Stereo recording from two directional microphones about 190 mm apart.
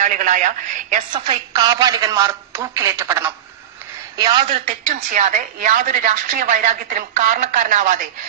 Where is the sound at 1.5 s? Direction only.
20° right (ahead or behind).